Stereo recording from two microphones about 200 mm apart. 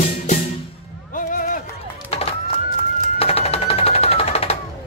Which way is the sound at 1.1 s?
45° left (ahead or behind).